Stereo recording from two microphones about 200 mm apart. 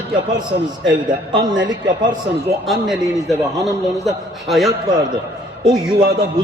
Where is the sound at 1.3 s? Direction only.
20° right (ahead or behind).